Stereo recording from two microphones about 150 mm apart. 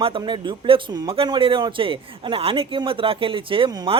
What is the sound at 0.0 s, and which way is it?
A man's voice, 35° right (ahead or behind).